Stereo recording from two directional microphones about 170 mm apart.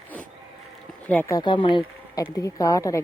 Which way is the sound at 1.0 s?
10° left (ahead or behind).